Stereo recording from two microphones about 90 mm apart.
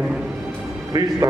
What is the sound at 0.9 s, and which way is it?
Speech, 50° right (ahead or behind).